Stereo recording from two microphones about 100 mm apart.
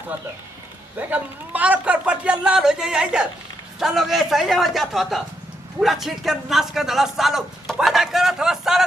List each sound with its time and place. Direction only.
0.9 s a man's voice: 15° right (ahead or behind)